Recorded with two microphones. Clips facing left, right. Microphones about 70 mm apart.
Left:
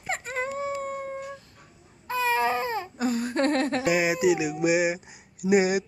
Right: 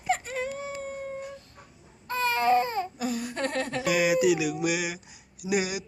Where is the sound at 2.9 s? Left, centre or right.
Left.